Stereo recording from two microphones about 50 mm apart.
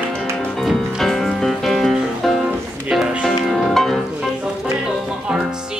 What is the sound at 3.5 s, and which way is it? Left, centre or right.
Music, centre.